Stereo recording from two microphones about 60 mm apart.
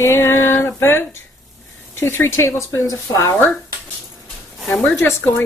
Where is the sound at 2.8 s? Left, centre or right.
Left.